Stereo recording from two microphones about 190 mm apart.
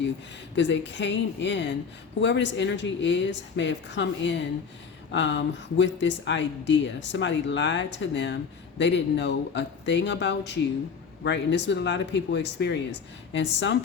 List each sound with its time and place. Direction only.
0.5 s speech: 70° left (ahead or behind)